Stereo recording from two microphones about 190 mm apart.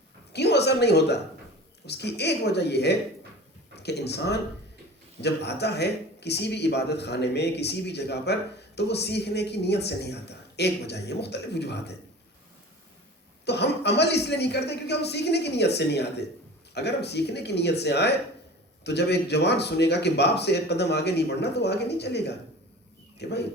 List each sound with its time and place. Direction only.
0.3 s speech: 60° left (ahead or behind)
13.4 s speech: 60° left (ahead or behind)